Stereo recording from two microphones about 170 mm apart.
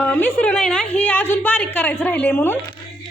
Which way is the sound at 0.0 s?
10° left (ahead or behind).